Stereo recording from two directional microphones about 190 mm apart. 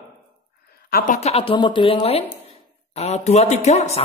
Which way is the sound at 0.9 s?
45° left (ahead or behind).